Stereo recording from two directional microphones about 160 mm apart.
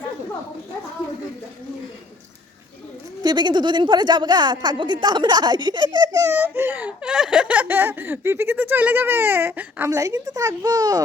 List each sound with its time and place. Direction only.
3.2 s a woman's voice: 25° right (ahead or behind)